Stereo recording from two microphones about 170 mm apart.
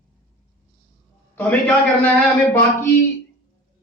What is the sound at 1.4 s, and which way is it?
Speech, 10° left (ahead or behind).